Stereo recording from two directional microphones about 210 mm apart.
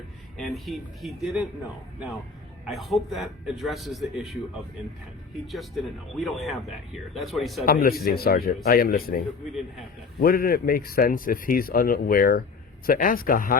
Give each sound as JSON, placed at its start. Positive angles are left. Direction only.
{"t": 0.3, "sound": "speech", "side_deg": 0}
{"t": 2.6, "sound": "speech", "side_deg": 0}
{"t": 5.5, "sound": "speech", "side_deg": 0}
{"t": 7.6, "sound": "speech", "side_deg": 45}